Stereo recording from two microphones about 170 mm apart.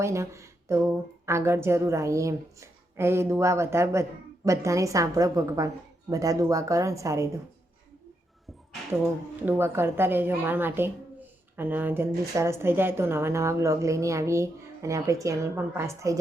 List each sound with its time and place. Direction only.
0.0 s a woman's voice: 15° right (ahead or behind)
9.5 s a woman's voice: 15° right (ahead or behind)